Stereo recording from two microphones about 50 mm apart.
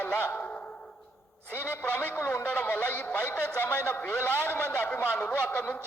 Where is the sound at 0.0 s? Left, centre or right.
Left.